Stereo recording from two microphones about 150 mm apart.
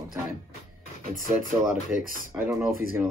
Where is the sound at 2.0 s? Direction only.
65° right (ahead or behind).